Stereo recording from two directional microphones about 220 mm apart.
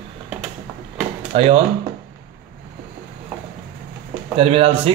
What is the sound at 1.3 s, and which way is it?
Speech, 30° right (ahead or behind).